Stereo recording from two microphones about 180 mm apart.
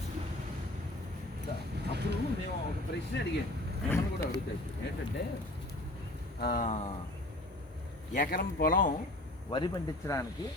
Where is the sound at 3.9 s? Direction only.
15° left (ahead or behind).